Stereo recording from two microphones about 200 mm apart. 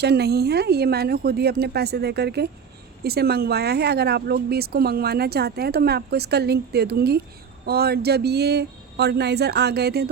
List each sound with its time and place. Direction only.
0.0 s speech: 55° right (ahead or behind)